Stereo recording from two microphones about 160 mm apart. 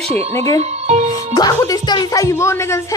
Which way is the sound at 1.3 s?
25° left (ahead or behind).